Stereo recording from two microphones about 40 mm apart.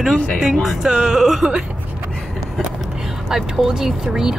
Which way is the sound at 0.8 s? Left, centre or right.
Centre.